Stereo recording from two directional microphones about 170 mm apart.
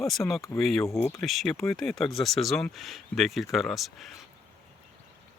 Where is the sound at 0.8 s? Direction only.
15° left (ahead or behind).